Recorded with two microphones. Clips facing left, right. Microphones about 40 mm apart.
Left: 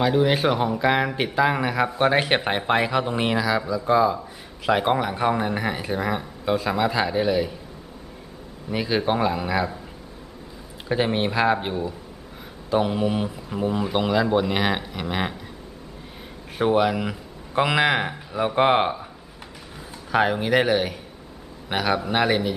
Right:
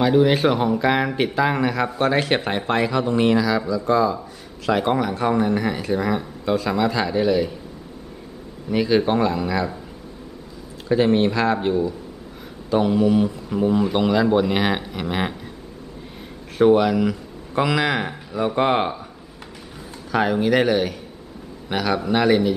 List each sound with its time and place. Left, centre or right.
0.0 s speech: centre
8.6 s speech: centre
10.9 s speech: centre
13.6 s speech: centre
16.5 s speech: centre
20.1 s speech: centre